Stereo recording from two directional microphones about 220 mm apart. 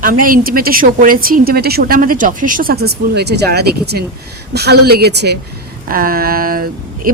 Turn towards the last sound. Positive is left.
turn(degrees=-40)  # may be behind; listen again after turning